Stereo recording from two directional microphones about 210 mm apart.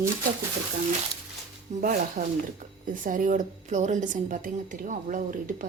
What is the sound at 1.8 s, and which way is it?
A woman's voice, 40° right (ahead or behind).